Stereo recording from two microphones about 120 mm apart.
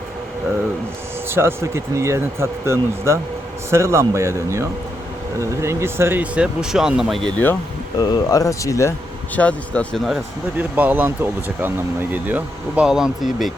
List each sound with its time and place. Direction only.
1.3 s speech: 20° right (ahead or behind); by 7.3 s centre (ahead or behind)
7.9 s speech: 35° left (ahead or behind)
9.3 s speech: 10° left (ahead or behind)
10.2 s speech: 15° right (ahead or behind)